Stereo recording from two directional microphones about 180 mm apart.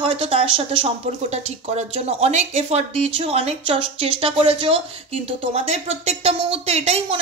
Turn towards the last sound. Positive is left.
turn(degrees=-35)  # may be behind; listen again after turning